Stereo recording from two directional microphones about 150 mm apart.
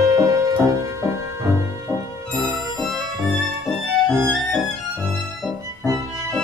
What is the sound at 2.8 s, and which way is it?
Music, centre (ahead or behind).